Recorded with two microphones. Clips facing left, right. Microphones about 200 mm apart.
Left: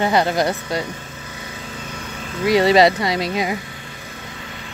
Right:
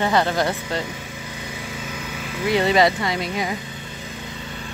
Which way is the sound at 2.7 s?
30° left (ahead or behind).